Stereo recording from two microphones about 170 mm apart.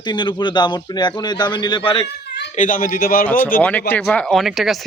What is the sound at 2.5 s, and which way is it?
Speech, 50° left (ahead or behind).